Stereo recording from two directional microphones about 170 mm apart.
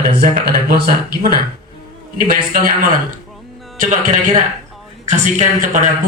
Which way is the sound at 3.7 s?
50° right (ahead or behind).